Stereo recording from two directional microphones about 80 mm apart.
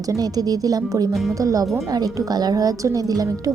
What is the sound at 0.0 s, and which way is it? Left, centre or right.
A woman's voice, right.